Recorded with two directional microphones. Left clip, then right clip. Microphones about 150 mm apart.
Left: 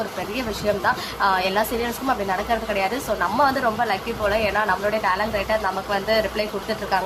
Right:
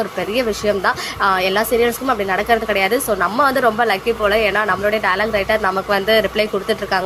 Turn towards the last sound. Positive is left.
turn(degrees=-30)  # may be behind; listen again after turning